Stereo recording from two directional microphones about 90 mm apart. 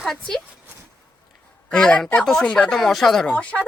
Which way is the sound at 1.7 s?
10° left (ahead or behind).